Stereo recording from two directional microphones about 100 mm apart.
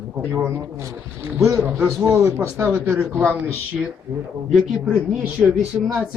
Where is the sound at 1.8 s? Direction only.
15° right (ahead or behind).